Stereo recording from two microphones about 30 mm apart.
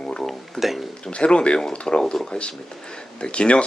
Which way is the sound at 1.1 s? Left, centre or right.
Left.